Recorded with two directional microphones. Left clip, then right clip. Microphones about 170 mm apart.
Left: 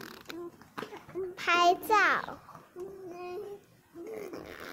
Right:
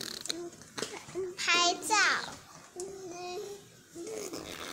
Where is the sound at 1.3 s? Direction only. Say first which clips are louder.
Left 3 dB; 65° left (ahead or behind).